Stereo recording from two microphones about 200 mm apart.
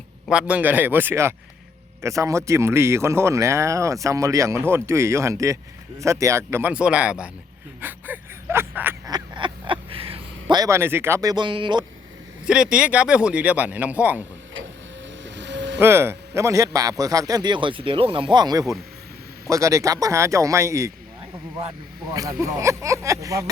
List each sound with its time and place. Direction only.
0.3 s speech: 5° right (ahead or behind)
7.8 s a sound: 10° right (ahead or behind)
12.5 s speech: 5° right (ahead or behind)
15.2 s vehicle: 65° right (ahead or behind)
15.8 s speech: 10° right (ahead or behind)
22.1 s speech: 15° right (ahead or behind)